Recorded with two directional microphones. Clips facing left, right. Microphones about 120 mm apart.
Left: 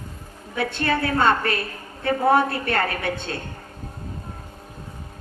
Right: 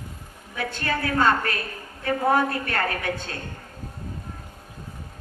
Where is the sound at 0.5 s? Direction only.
30° left (ahead or behind).